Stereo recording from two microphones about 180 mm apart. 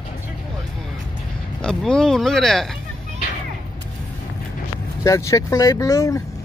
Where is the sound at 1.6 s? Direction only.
5° left (ahead or behind).